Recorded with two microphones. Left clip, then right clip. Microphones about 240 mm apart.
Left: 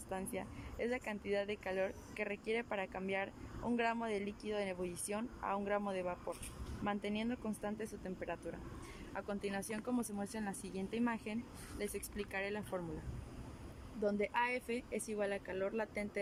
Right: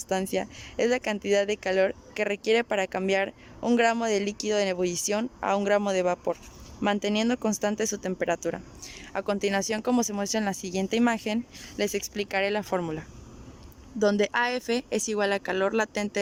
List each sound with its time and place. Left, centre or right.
0.1 s speech: right
14.0 s speech: right